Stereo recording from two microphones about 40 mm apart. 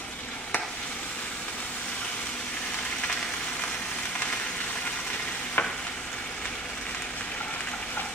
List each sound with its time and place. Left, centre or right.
5.6 s stir: left